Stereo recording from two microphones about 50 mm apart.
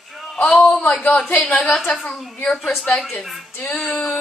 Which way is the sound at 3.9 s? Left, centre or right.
Centre.